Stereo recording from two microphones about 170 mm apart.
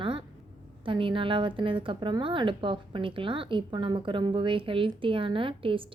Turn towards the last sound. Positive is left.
turn(degrees=-30)  # may be behind; listen again after turning